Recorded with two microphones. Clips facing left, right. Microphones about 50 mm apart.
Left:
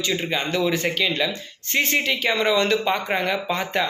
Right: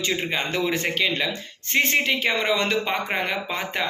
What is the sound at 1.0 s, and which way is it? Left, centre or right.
Speech, centre.